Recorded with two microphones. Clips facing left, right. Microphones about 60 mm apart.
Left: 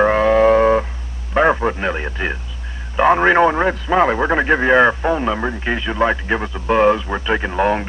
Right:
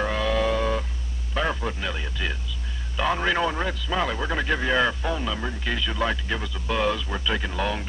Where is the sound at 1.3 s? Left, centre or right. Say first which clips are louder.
Left 12 dB; left.